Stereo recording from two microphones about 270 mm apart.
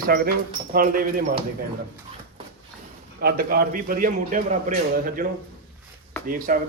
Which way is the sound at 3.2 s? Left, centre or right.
Right.